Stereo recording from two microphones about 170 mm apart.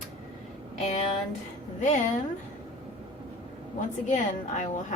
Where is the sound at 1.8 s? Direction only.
45° left (ahead or behind).